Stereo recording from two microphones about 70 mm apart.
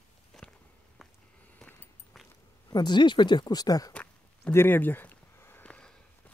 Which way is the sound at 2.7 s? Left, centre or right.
Left.